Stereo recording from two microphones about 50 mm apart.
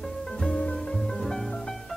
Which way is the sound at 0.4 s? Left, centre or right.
Left.